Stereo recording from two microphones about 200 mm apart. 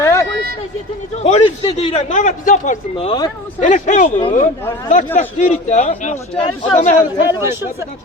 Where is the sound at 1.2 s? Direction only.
30° left (ahead or behind).